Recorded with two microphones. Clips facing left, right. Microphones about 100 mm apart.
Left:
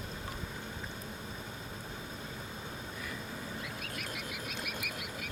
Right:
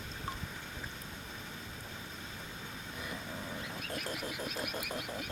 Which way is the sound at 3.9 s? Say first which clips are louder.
Right 2 dB; 30° right (ahead or behind).